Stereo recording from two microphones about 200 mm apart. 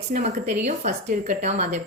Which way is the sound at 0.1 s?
40° right (ahead or behind).